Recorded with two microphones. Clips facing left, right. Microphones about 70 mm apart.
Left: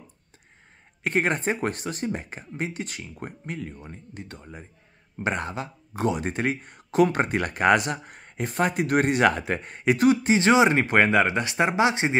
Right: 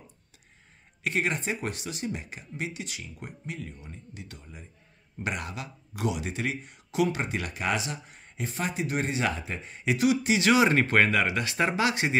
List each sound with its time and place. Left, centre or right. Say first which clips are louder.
1.0 s speech: left 5 dB; left
10.5 s speech: left 2 dB; centre